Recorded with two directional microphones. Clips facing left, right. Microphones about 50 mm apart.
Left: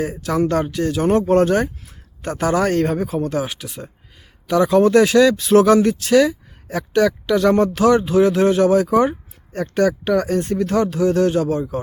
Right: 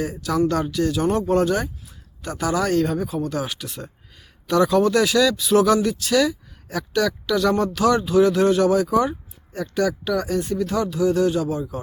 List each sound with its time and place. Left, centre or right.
0.0 s speech: left
3.4 s speech: centre
4.7 s speech: left